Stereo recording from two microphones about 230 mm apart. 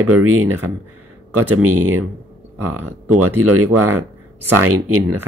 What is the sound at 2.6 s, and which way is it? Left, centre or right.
Speech, right.